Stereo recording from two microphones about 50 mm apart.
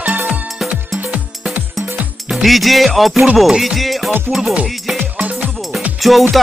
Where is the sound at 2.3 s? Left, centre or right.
Centre.